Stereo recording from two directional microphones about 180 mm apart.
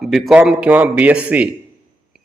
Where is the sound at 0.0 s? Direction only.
Centre (ahead or behind).